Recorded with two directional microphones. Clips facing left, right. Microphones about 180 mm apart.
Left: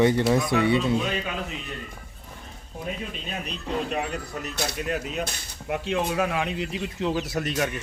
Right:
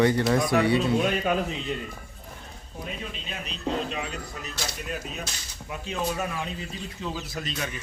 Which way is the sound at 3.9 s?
60° left (ahead or behind).